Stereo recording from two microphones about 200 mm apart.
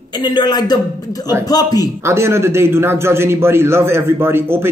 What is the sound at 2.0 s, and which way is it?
A man's voice, 15° right (ahead or behind).